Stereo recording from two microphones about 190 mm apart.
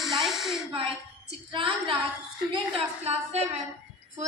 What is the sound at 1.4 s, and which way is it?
A woman's voice, 25° right (ahead or behind).